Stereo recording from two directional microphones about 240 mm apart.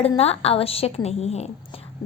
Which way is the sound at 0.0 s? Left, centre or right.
Left.